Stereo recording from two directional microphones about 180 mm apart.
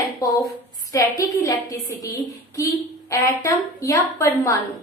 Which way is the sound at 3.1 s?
15° left (ahead or behind).